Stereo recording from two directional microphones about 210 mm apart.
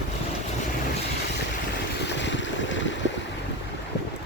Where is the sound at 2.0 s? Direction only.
55° left (ahead or behind).